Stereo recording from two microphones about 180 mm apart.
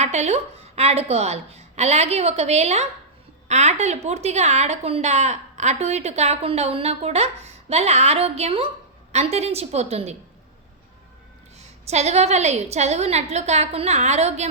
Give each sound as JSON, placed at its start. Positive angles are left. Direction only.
{"t": 0.0, "sound": "a woman's voice", "side_deg": -40}
{"t": 11.5, "sound": "a woman's voice", "side_deg": -35}